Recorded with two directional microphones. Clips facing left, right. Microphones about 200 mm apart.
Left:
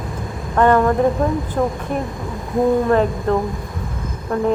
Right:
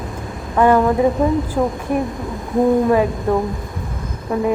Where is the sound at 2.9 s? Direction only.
10° right (ahead or behind).